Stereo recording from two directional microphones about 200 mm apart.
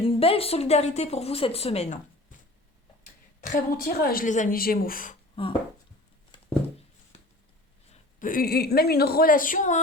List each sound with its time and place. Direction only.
0.0 s speech: 30° left (ahead or behind)
3.0 s a woman's voice: 45° left (ahead or behind)
5.4 s speech: 25° left (ahead or behind)
7.9 s a woman's voice: 45° left (ahead or behind)